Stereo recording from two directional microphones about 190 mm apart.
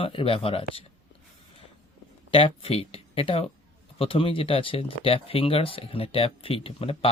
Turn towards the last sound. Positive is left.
turn(degrees=30)  # may be behind; listen again after turning